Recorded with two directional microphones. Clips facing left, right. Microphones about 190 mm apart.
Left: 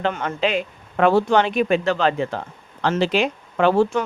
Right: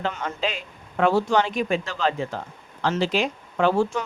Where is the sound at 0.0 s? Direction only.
60° left (ahead or behind).